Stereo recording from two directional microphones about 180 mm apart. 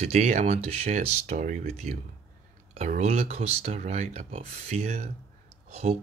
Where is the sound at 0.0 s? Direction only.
40° right (ahead or behind).